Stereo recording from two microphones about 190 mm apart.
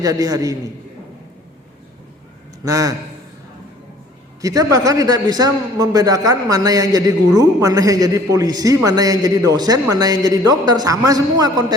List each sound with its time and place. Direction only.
0.0 s a man's voice: 20° right (ahead or behind)
2.6 s a man's voice: 15° right (ahead or behind)
4.4 s a man's voice: 20° right (ahead or behind)